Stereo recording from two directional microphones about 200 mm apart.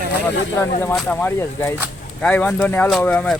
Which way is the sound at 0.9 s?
5° left (ahead or behind).